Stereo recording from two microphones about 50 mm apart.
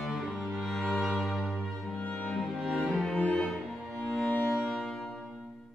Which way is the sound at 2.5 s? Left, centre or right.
Centre.